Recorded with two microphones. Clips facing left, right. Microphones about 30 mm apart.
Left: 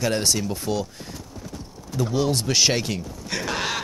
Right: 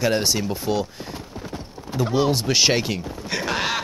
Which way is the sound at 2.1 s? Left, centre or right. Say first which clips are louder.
Right 3 dB; right.